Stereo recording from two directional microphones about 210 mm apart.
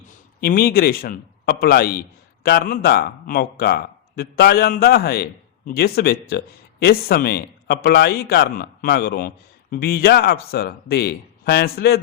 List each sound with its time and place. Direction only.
0.4 s speech: 45° left (ahead or behind)